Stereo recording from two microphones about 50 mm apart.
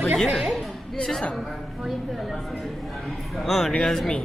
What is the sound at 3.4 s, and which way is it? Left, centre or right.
Speech, centre.